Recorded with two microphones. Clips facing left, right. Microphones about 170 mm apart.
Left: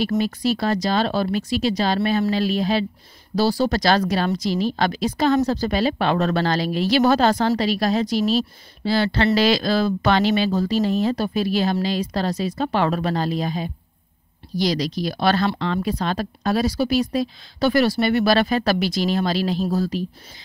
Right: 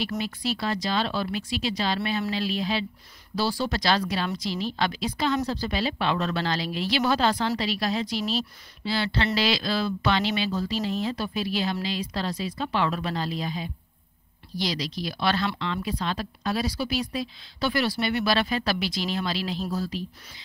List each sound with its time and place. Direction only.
0.2 s speech: 40° left (ahead or behind)